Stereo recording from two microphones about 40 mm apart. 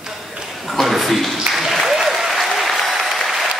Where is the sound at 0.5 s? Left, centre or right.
Centre.